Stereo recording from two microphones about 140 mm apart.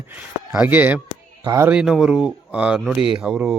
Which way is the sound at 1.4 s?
25° right (ahead or behind).